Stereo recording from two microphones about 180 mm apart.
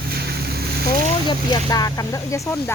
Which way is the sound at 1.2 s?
20° left (ahead or behind).